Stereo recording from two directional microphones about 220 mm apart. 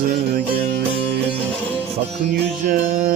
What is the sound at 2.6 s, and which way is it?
Mantra, 30° right (ahead or behind).